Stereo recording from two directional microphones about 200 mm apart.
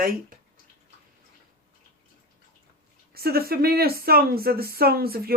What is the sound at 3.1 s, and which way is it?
Speech, 50° right (ahead or behind).